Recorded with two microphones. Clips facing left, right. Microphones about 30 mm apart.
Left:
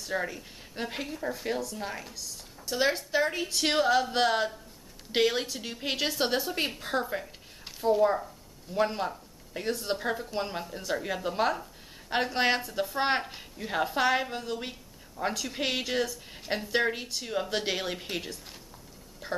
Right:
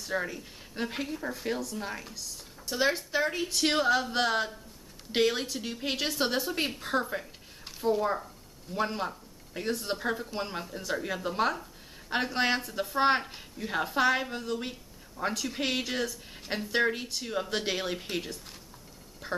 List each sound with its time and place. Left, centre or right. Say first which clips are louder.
0.0 s speech: even; centre